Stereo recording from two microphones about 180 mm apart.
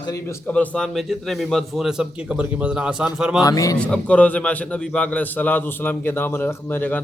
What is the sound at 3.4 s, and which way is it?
Speech, 20° left (ahead or behind).